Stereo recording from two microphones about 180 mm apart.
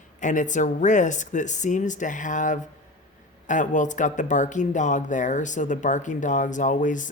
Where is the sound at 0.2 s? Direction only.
45° left (ahead or behind).